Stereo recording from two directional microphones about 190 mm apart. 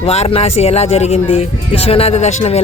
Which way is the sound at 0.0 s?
35° left (ahead or behind).